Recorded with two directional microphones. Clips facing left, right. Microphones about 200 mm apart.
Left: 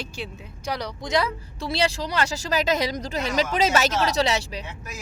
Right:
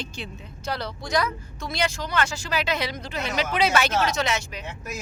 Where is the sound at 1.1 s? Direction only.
30° left (ahead or behind).